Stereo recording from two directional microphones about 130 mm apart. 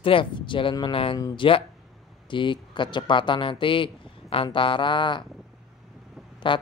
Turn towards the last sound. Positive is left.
turn(degrees=40)  # may be behind; listen again after turning